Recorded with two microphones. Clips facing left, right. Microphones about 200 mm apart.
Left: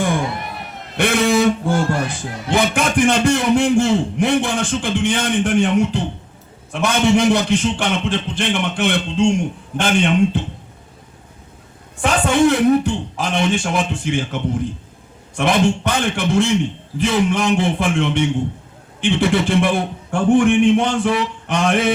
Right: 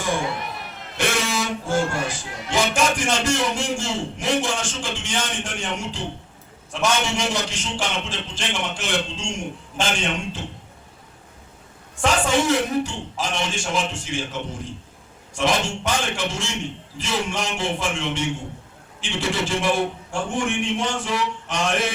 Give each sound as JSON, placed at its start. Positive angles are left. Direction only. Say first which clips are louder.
{"t": 0.9, "sound": "a man's voice", "louder": "left 8 dB", "side_deg": 60}
{"t": 12.0, "sound": "a man's voice", "louder": "left 5 dB", "side_deg": 60}